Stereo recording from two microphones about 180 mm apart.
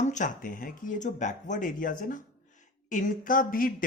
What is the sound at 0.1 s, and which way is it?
A man's voice, 45° left (ahead or behind).